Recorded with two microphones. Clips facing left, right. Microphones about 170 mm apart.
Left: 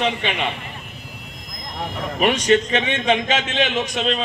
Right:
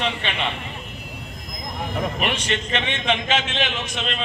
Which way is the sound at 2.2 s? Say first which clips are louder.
Left 8 dB; 40° left (ahead or behind).